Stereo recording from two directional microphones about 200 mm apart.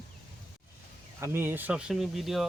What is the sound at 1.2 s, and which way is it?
Speech, 10° right (ahead or behind).